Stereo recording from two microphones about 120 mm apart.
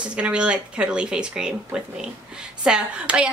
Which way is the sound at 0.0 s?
10° right (ahead or behind).